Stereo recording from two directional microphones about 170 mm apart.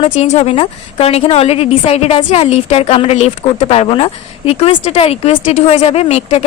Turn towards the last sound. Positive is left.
turn(degrees=35)  # may be behind; listen again after turning